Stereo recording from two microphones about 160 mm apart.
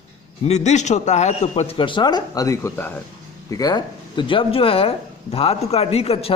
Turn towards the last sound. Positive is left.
turn(degrees=40)  # may be behind; listen again after turning